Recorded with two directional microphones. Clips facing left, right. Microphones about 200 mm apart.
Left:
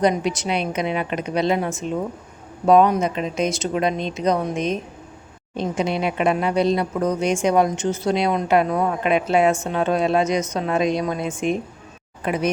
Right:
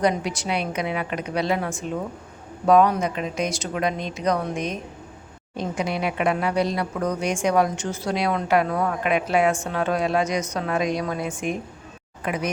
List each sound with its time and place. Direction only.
0.0 s speech: 20° left (ahead or behind)